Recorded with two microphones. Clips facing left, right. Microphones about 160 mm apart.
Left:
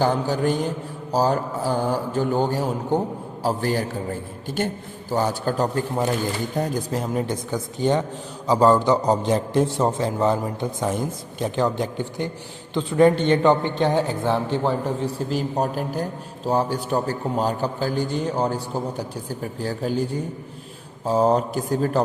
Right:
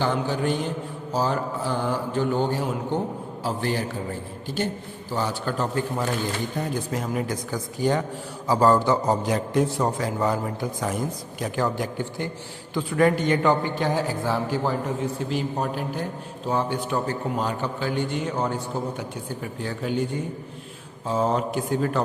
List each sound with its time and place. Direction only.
0.0 s a man's voice: 40° left (ahead or behind)
5.1 s a man's voice: 45° left (ahead or behind)
7.5 s a man's voice: 20° left (ahead or behind)
9.3 s a man's voice: 30° left (ahead or behind)